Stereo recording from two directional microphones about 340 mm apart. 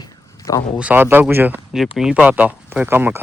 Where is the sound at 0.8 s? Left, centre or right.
Centre.